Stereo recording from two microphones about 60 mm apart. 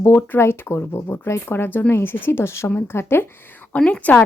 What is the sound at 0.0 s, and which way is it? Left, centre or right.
Speech, left.